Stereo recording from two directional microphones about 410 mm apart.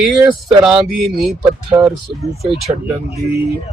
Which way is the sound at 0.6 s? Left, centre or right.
Centre.